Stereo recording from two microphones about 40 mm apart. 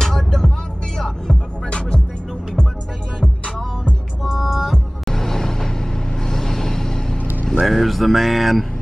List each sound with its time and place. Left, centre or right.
0.0 s music: centre
4.2 s music: centre
5.0 s vehicle: centre
7.6 s speech: centre